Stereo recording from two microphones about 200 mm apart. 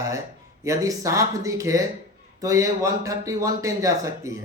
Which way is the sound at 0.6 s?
15° right (ahead or behind).